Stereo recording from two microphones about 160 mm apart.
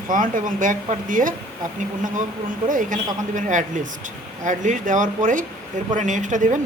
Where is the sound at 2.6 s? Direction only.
55° right (ahead or behind).